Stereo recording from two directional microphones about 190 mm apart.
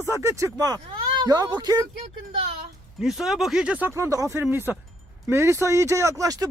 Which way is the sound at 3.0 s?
Centre (ahead or behind).